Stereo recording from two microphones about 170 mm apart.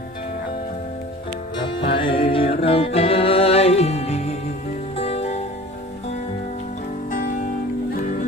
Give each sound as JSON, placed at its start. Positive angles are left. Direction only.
{"t": 1.9, "sound": "music", "side_deg": 30}
{"t": 7.1, "sound": "music", "side_deg": 50}